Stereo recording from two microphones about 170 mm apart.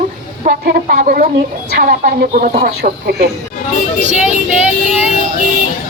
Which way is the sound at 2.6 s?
65° right (ahead or behind).